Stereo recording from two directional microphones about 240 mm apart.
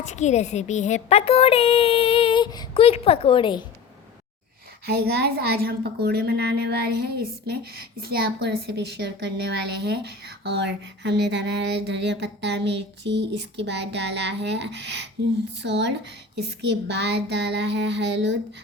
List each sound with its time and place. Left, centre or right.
0.0 s a woman's voice: left
4.9 s a woman's voice: right